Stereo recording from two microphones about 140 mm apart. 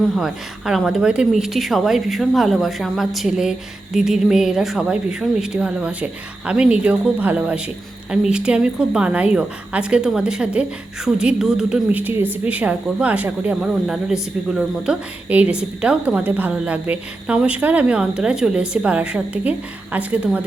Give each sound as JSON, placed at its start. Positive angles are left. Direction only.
{"t": 0.0, "sound": "a woman's voice", "side_deg": -5}